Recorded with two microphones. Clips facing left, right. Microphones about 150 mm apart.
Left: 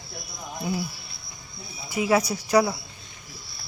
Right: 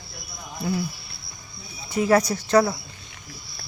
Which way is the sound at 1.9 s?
5° left (ahead or behind).